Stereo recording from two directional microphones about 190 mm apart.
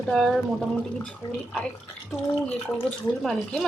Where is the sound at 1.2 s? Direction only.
25° left (ahead or behind).